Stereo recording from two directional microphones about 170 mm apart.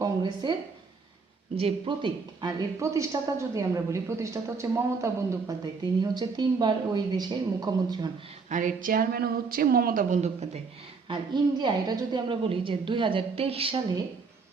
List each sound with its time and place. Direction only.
0.0 s speech: 25° right (ahead or behind)
1.5 s speech: 30° right (ahead or behind)
8.4 s a woman's voice: 50° right (ahead or behind)
11.6 s a woman's voice: 25° right (ahead or behind)